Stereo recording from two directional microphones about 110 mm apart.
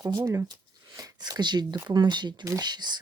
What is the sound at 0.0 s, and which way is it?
Speech, 35° right (ahead or behind).